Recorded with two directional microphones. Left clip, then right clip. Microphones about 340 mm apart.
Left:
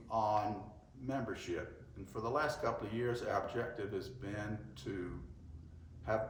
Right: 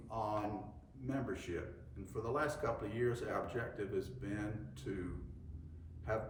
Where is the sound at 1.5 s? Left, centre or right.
Centre.